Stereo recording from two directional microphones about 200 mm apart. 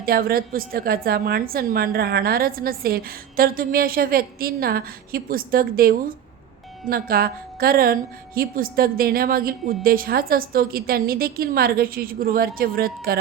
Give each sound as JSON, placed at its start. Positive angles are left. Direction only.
{"t": 0.0, "sound": "a woman's voice", "side_deg": -50}